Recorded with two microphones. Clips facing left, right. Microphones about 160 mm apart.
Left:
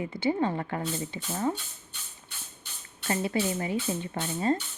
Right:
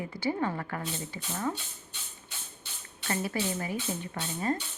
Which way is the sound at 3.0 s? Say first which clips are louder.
Left 3 dB; 25° left (ahead or behind).